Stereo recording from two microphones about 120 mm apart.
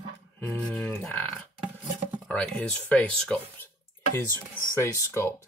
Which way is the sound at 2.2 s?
10° left (ahead or behind).